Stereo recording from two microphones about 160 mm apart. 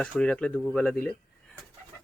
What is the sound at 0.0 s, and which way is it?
Speech, 5° left (ahead or behind).